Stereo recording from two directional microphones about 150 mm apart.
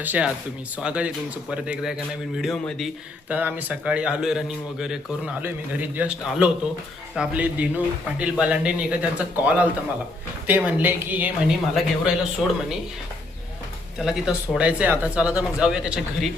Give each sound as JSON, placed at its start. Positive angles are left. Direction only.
{"t": 0.0, "sound": "a man's voice", "side_deg": -10}
{"t": 3.2, "sound": "a man's voice", "side_deg": -10}
{"t": 14.0, "sound": "a man's voice", "side_deg": -5}